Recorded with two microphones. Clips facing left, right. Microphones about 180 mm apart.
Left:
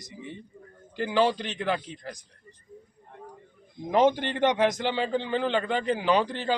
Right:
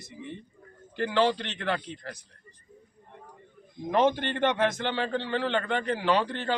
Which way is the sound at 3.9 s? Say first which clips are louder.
Left 2 dB; 15° left (ahead or behind).